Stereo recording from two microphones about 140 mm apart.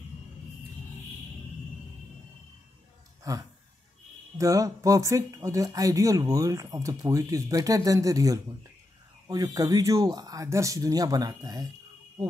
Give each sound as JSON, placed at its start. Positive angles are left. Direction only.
{"t": 3.3, "sound": "speech", "side_deg": -25}